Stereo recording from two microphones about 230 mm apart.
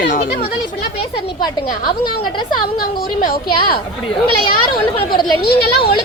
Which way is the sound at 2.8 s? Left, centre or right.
Left.